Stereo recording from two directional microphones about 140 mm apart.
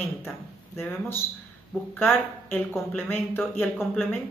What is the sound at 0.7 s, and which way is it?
Speech, 15° left (ahead or behind).